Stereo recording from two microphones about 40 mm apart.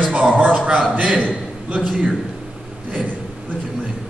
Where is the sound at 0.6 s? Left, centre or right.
Right.